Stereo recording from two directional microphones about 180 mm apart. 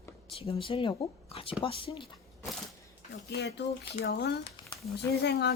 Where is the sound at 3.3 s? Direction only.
65° left (ahead or behind).